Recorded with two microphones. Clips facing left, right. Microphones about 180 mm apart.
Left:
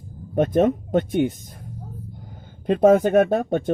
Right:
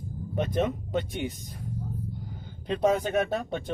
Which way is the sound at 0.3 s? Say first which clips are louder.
Left 9 dB; 50° left (ahead or behind).